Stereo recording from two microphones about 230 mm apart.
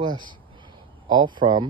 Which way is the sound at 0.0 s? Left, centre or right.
Centre.